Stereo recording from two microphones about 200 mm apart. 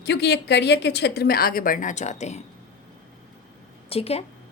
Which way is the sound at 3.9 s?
30° left (ahead or behind).